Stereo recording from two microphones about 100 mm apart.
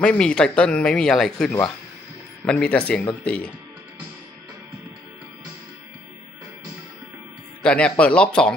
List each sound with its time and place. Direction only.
0.0 s speech: 10° left (ahead or behind)
7.6 s speech: 10° left (ahead or behind)